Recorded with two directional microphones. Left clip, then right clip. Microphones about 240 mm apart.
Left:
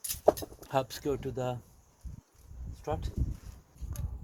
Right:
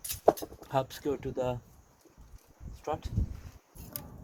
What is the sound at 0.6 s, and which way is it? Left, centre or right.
Speech, left.